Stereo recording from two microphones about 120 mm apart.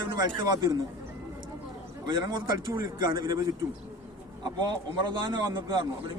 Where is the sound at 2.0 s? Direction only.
40° right (ahead or behind).